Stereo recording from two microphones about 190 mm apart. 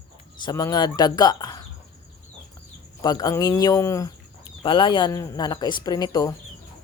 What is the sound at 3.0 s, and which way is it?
A woman's voice, 20° left (ahead or behind).